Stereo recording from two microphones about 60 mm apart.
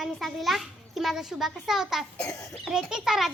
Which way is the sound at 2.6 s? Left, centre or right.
Centre.